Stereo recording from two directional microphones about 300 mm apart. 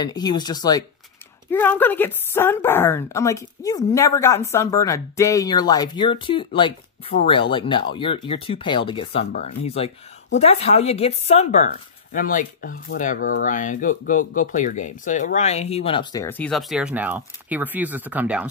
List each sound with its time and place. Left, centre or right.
0.0 s speech: centre